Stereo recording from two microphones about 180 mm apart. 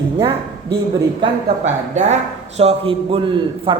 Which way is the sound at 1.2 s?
40° right (ahead or behind).